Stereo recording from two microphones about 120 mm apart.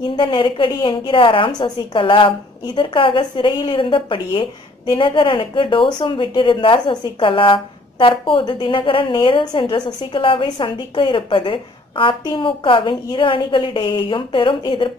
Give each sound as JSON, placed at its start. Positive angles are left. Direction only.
{"t": 0.0, "sound": "a woman's voice", "side_deg": 40}